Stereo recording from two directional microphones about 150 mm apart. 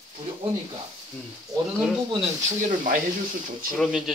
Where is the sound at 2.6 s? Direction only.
60° right (ahead or behind).